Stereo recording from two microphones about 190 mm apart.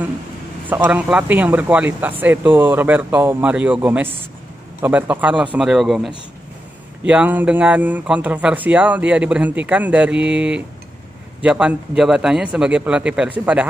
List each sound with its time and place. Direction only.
0.7 s a man's voice: 10° right (ahead or behind)